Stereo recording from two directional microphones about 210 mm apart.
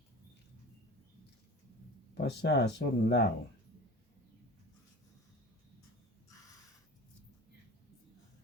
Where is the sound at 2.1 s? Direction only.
55° left (ahead or behind).